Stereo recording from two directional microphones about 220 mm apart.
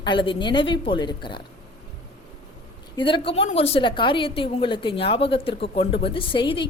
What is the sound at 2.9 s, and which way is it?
Speech, 20° left (ahead or behind).